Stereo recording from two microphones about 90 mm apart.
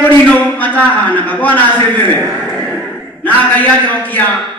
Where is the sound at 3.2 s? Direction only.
15° left (ahead or behind).